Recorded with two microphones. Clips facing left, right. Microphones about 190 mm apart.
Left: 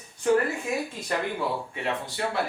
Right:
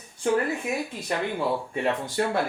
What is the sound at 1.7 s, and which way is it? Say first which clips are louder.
Speech: right 5 dB; 45° right (ahead or behind).